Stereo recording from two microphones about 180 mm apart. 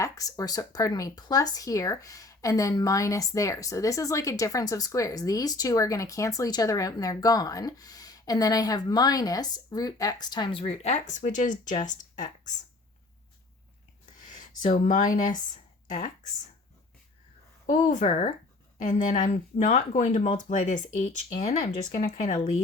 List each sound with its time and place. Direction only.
0.0 s speech: 20° left (ahead or behind); by 12.3 s 45° left (ahead or behind)
17.7 s speech: 45° left (ahead or behind)